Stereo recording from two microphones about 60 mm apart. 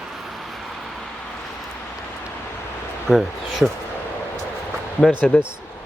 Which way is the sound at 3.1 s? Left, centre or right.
Centre.